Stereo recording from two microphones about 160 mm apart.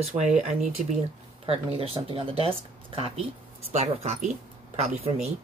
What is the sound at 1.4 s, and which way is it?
Speech, 35° right (ahead or behind).